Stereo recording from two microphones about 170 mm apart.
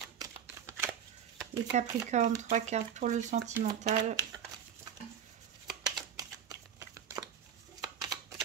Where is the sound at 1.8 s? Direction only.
45° right (ahead or behind).